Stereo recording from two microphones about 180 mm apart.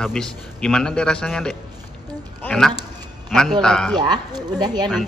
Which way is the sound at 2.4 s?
5° left (ahead or behind).